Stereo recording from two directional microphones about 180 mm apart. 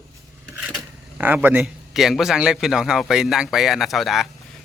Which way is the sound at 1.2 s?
10° right (ahead or behind).